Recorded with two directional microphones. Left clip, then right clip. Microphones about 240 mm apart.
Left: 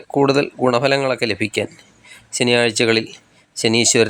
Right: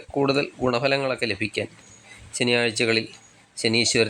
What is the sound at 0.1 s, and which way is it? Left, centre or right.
Speech, centre.